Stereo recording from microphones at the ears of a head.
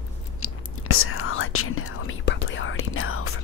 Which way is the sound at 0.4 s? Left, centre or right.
Left.